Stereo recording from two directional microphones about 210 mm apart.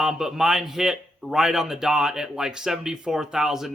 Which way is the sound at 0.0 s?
Centre (ahead or behind).